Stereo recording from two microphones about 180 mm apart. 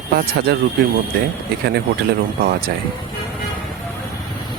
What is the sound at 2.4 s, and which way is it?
Speech, 60° right (ahead or behind).